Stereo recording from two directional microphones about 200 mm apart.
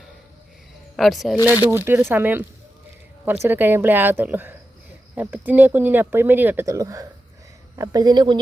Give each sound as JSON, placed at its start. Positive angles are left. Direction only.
{"t": 0.9, "sound": "speech", "side_deg": 0}
{"t": 1.5, "sound": "a woman's voice", "side_deg": -10}